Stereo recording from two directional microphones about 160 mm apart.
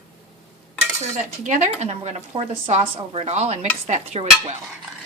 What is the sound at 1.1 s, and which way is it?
Speech, 50° right (ahead or behind).